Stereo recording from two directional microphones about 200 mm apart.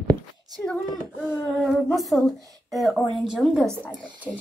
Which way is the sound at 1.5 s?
Centre (ahead or behind).